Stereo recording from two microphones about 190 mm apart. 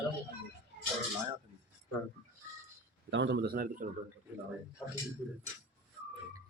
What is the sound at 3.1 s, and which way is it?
Speech, 70° right (ahead or behind).